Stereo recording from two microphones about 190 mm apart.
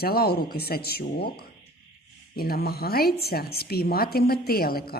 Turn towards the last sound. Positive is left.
turn(degrees=50)  # may be behind; listen again after turning